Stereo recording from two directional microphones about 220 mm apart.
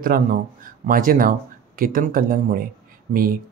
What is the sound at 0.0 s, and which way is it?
Speech, 40° right (ahead or behind).